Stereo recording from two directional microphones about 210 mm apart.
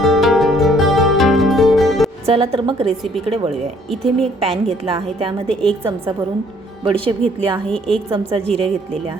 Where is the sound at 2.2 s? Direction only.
25° right (ahead or behind).